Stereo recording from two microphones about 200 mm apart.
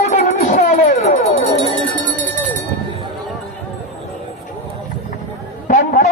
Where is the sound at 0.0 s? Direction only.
35° left (ahead or behind).